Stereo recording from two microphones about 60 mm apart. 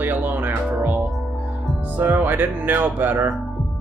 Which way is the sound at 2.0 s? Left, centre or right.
Right.